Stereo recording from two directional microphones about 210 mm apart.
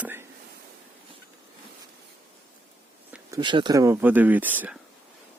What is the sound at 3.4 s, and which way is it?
Speech, 20° right (ahead or behind).